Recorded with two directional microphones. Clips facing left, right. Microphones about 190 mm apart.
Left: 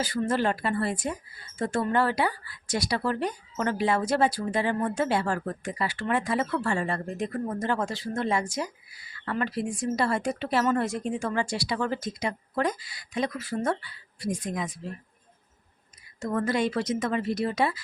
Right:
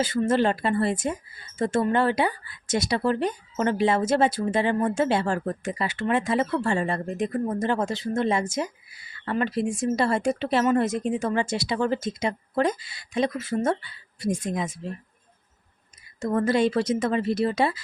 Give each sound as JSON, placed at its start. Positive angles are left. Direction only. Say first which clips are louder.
{"t": 0.0, "sound": "speech", "louder": "right 4 dB", "side_deg": -25}
{"t": 16.2, "sound": "speech", "louder": "right 4 dB", "side_deg": -25}